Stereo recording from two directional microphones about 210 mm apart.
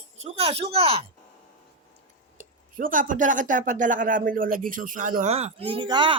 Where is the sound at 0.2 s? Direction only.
30° right (ahead or behind).